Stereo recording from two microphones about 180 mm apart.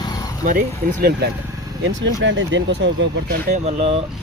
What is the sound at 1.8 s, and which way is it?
Speech, 90° right.